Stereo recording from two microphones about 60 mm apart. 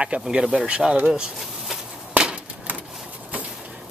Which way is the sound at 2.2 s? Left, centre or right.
Centre.